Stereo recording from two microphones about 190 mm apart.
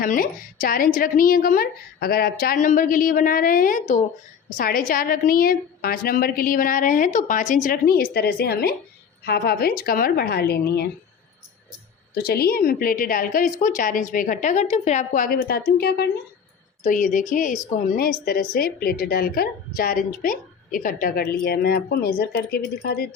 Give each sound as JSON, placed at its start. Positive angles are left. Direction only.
{"t": 0.0, "sound": "a woman's voice", "side_deg": 45}
{"t": 12.1, "sound": "a woman's voice", "side_deg": 55}
{"t": 16.8, "sound": "a woman's voice", "side_deg": 45}